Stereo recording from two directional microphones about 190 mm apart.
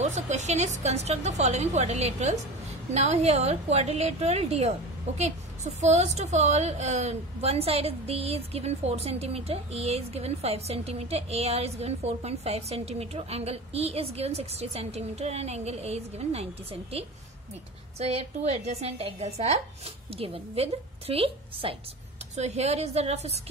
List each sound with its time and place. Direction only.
0.0 s a woman's voice: 35° right (ahead or behind)
17.9 s a woman's voice: 35° right (ahead or behind)